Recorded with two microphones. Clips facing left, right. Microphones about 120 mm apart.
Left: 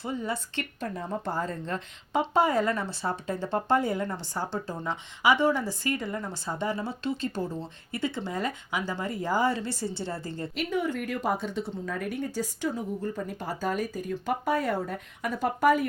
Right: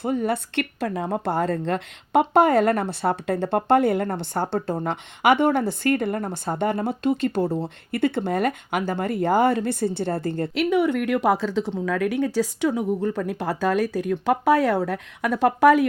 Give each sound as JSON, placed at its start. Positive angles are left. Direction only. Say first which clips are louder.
{"t": 0.0, "sound": "speech", "louder": "right 8 dB", "side_deg": -60}